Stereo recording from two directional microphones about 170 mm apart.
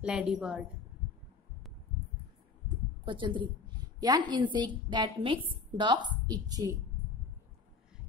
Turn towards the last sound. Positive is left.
turn(degrees=-20)  # may be behind; listen again after turning